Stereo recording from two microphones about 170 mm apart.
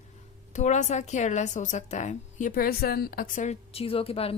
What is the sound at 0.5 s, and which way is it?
A woman's voice, 45° left (ahead or behind).